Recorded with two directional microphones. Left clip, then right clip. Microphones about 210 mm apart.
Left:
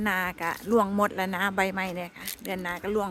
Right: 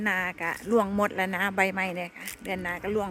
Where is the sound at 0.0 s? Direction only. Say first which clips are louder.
Even; 15° left (ahead or behind).